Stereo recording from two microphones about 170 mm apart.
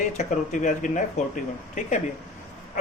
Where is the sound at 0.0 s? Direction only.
50° left (ahead or behind).